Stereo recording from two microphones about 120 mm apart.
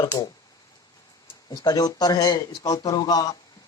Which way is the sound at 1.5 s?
35° left (ahead or behind).